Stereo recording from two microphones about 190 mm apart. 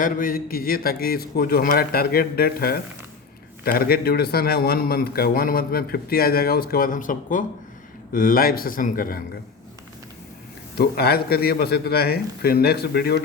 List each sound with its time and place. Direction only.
0.0 s a man's voice: 45° left (ahead or behind)
10.8 s a man's voice: 55° left (ahead or behind)